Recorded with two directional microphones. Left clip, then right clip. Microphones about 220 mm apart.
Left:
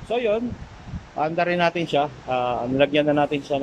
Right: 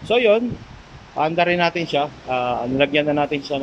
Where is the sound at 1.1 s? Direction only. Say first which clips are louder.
Right 4 dB; 10° right (ahead or behind).